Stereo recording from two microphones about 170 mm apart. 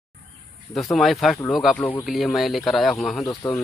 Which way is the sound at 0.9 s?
Centre (ahead or behind).